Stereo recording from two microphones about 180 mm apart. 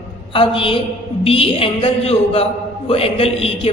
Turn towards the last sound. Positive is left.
turn(degrees=30)  # may be behind; listen again after turning